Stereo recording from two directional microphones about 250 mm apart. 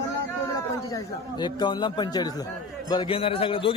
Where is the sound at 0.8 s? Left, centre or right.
Centre.